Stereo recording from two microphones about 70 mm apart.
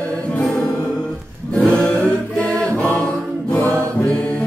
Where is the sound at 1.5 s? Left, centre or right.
Centre.